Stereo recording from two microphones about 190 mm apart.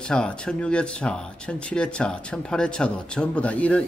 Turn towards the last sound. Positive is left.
turn(degrees=5)  # may be behind; listen again after turning